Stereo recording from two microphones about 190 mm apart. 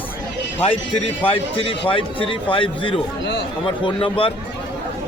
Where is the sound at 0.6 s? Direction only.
30° left (ahead or behind).